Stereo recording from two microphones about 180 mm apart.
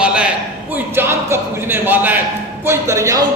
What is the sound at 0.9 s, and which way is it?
Music, 15° right (ahead or behind).